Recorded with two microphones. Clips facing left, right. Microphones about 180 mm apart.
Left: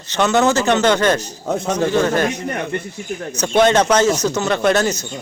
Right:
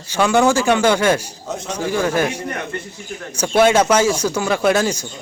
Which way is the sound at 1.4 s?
55° left (ahead or behind).